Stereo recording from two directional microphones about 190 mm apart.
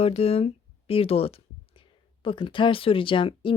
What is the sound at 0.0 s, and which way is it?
Speech, 30° left (ahead or behind).